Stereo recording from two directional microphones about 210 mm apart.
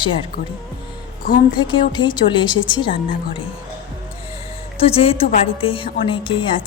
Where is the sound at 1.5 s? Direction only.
20° left (ahead or behind).